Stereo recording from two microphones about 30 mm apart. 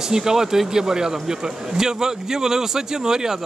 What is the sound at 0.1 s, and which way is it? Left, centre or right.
Speech, centre.